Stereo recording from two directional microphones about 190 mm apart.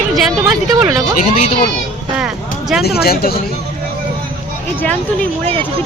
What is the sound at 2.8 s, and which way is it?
Speech, 55° left (ahead or behind).